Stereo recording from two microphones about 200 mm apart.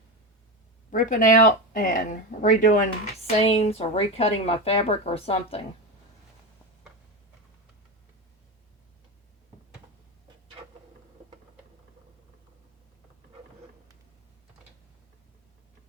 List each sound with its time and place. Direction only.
0.9 s speech: 40° left (ahead or behind)
3.2 s speech: 30° left (ahead or behind)